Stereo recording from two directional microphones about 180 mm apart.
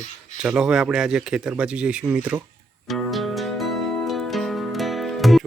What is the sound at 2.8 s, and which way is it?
Music, centre (ahead or behind).